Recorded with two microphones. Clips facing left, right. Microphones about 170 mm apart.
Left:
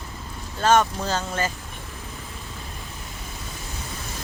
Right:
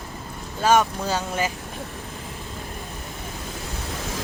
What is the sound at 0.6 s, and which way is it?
Speech, 10° right (ahead or behind).